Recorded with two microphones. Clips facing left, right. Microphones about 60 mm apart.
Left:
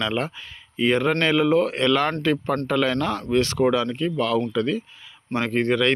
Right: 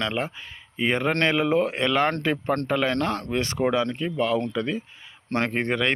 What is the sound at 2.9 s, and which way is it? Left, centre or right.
Speech, right.